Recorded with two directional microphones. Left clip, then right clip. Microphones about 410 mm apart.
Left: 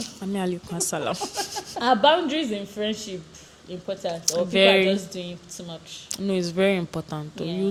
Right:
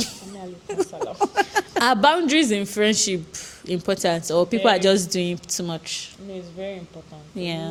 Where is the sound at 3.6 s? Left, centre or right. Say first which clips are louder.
Right 7 dB; right.